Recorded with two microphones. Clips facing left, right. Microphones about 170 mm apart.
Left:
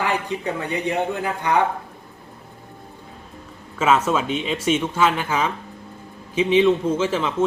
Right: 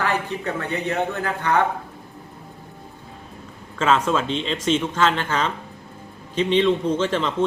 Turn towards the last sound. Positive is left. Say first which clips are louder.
# even
turn(degrees=5)  # may be behind; listen again after turning